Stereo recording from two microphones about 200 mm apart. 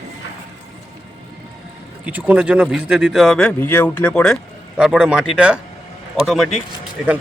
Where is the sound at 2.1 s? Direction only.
10° right (ahead or behind).